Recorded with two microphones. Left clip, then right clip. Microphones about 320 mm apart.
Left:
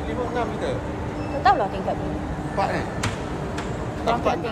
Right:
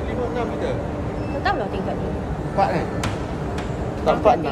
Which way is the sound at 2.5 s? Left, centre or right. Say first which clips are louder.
Right 4 dB; centre.